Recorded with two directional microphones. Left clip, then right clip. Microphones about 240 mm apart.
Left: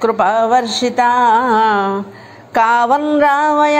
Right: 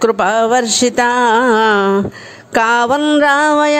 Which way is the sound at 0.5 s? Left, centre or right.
Right.